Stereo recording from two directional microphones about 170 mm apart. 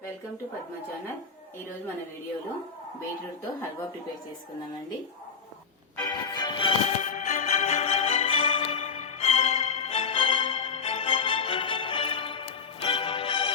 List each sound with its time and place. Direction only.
6.1 s music: 25° left (ahead or behind)
7.0 s music: 50° left (ahead or behind)